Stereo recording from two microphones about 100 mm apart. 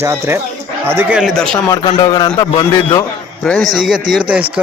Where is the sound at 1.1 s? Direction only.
5° right (ahead or behind).